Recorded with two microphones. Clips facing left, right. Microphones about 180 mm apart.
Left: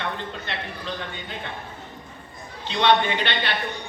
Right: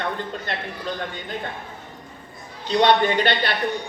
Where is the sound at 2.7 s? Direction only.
40° right (ahead or behind).